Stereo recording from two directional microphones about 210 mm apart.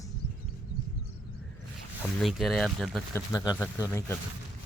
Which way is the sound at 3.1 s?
15° left (ahead or behind).